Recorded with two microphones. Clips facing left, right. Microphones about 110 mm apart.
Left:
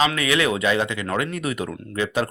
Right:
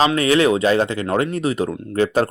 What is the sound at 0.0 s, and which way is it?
Speech, 35° right (ahead or behind).